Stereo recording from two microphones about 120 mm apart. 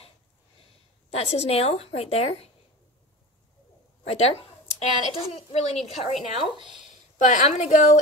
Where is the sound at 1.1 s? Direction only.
60° left (ahead or behind).